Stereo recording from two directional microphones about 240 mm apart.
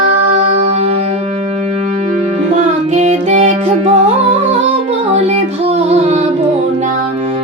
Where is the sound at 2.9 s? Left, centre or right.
Right.